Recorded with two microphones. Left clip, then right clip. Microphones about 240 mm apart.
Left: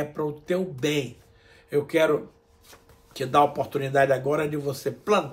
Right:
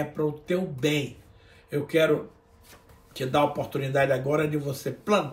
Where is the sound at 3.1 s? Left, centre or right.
Centre.